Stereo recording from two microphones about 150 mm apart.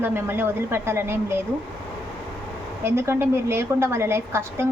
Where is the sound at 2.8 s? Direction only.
15° right (ahead or behind).